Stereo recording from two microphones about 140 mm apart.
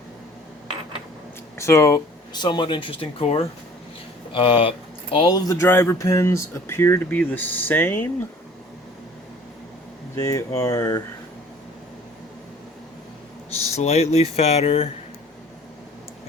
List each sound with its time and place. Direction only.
1.5 s speech: 20° left (ahead or behind); by 5.4 s 40° left (ahead or behind)
5.5 s speech: 15° left (ahead or behind)
10.2 s speech: 25° left (ahead or behind)
13.7 s speech: 50° left (ahead or behind)